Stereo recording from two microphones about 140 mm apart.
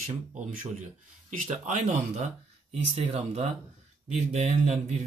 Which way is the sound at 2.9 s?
50° right (ahead or behind).